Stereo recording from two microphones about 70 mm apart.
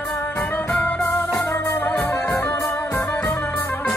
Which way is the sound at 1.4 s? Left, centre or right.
Left.